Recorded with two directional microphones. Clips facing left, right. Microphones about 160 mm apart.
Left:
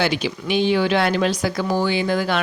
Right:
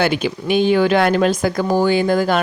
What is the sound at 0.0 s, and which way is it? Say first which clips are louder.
Speech: right 4 dB; 50° right (ahead or behind).